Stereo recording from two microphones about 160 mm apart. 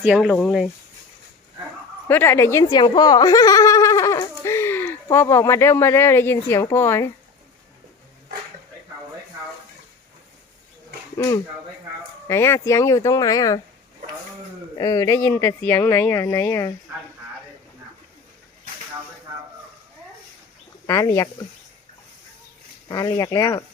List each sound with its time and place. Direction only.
0.0 s speech: 5° right (ahead or behind)
2.0 s a sound: 15° left (ahead or behind)
5.0 s speech: 15° left (ahead or behind)
12.3 s speech: 15° left (ahead or behind)
14.8 s speech: 20° left (ahead or behind)
20.8 s speech: 20° left (ahead or behind)
22.9 s speech: 20° left (ahead or behind)